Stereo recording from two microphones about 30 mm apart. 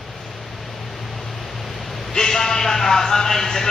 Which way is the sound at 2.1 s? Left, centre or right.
Centre.